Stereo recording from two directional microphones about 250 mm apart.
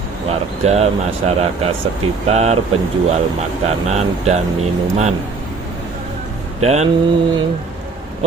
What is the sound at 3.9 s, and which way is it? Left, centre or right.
Speech, right.